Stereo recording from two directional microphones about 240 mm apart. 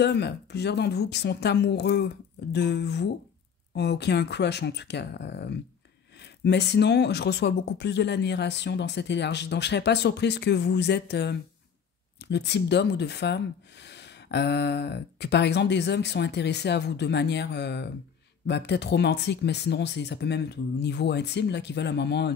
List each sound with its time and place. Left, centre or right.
0.0 s speech: left